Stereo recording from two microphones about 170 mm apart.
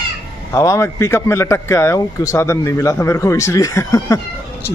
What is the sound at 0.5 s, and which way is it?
Speech, 20° left (ahead or behind).